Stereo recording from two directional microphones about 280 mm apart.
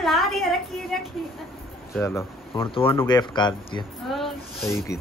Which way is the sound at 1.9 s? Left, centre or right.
Centre.